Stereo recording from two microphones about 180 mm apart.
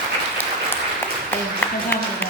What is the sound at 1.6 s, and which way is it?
Speech, 10° left (ahead or behind).